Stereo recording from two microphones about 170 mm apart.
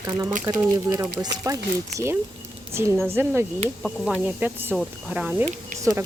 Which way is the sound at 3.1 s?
15° right (ahead or behind).